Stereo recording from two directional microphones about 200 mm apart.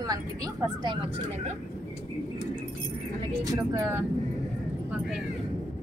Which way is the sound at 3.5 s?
10° right (ahead or behind).